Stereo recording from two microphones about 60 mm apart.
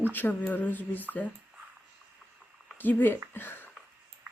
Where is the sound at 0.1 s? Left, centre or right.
Left.